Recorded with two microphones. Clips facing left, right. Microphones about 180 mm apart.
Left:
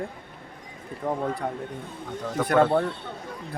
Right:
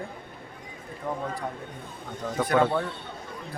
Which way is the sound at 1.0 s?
45° left (ahead or behind).